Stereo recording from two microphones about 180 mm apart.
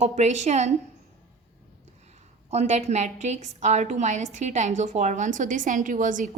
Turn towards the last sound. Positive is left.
turn(degrees=-45)  # may be behind; listen again after turning